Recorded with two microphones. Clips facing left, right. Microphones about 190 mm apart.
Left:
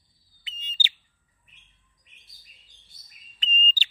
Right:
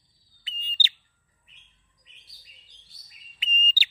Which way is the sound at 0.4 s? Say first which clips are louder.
Even; 20° left (ahead or behind).